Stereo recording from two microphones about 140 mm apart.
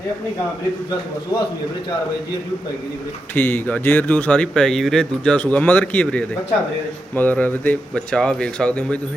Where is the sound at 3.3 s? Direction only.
15° left (ahead or behind).